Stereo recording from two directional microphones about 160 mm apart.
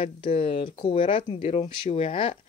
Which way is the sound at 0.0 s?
35° left (ahead or behind).